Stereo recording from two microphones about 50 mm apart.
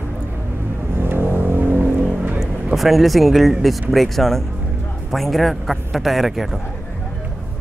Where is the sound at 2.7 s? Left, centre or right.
Centre.